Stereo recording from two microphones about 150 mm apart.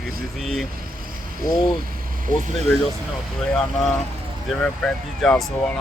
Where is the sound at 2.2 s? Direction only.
65° right (ahead or behind).